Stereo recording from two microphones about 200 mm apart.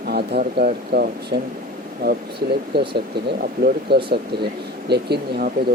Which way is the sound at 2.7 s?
55° right (ahead or behind).